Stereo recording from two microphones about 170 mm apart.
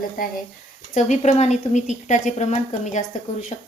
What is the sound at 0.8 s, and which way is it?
A woman's voice, 45° left (ahead or behind).